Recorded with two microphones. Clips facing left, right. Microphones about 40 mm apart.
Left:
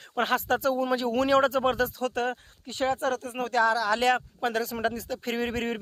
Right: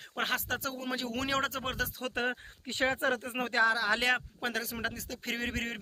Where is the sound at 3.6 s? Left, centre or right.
Centre.